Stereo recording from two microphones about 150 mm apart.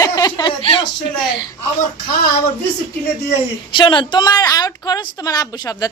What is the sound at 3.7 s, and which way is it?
A man's voice, 30° left (ahead or behind).